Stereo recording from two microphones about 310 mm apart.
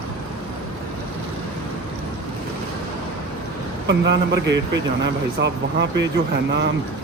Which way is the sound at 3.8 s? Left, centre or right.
Right.